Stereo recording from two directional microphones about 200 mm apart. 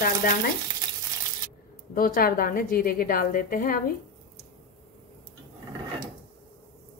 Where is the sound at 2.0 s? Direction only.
45° left (ahead or behind).